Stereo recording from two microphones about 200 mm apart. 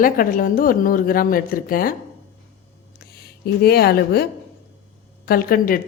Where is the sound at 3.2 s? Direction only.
50° left (ahead or behind).